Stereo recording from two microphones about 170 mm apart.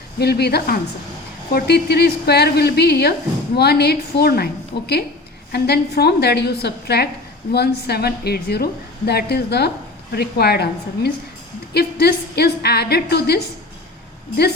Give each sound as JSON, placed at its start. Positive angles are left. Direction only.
{"t": 0.2, "sound": "a woman's voice", "side_deg": 70}